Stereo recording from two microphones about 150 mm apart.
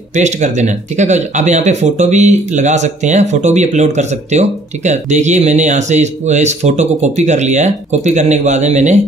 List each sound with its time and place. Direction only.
0.1 s speech: 50° right (ahead or behind)